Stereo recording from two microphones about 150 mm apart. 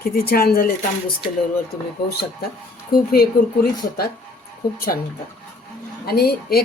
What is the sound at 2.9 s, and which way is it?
A woman's voice, 85° left.